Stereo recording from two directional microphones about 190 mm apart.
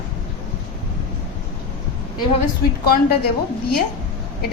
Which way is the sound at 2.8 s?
55° left (ahead or behind).